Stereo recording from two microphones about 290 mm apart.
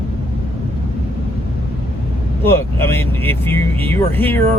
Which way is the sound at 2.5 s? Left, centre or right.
Centre.